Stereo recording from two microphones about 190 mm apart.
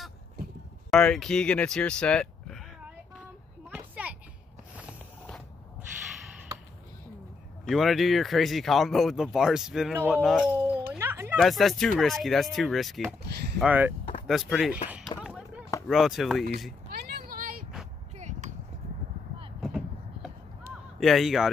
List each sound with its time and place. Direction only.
0.8 s speech: 5° left (ahead or behind)
3.6 s a sound: 5° right (ahead or behind)
7.6 s speech: centre (ahead or behind)
9.9 s a sound: 5° right (ahead or behind)
11.3 s speech: centre (ahead or behind)
13.2 s a sound: 60° right (ahead or behind)
13.6 s speech: 10° right (ahead or behind)
15.2 s chop: centre (ahead or behind)
15.9 s speech: centre (ahead or behind)
16.9 s vehicle: 50° right (ahead or behind)
18.1 s a sound: 35° right (ahead or behind)
19.6 s vehicle: centre (ahead or behind)
21.0 s speech: centre (ahead or behind)